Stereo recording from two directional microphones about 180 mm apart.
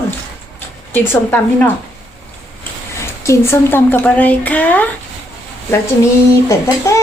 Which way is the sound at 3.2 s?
15° left (ahead or behind).